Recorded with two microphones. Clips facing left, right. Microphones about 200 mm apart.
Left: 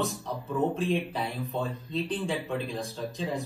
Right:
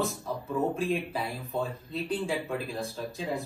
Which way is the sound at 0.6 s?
Centre (ahead or behind).